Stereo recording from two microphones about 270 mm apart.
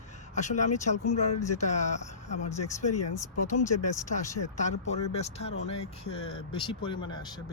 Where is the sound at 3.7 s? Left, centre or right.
Left.